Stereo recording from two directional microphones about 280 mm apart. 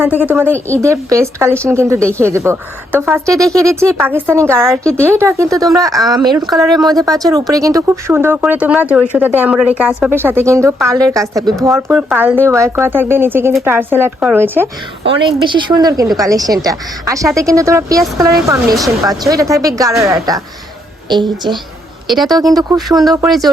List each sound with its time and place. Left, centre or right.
0.0 s a woman's voice: centre
4.8 s a woman's voice: centre
5.0 s a woman's voice: centre
23.1 s a woman's voice: centre